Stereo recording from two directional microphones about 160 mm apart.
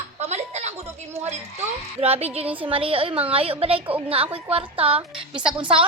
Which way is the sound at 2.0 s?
40° right (ahead or behind).